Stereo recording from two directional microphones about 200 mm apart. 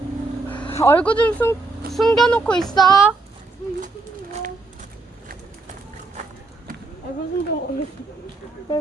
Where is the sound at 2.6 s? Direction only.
20° left (ahead or behind).